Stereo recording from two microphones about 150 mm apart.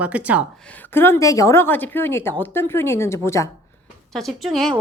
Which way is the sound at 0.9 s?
15° left (ahead or behind).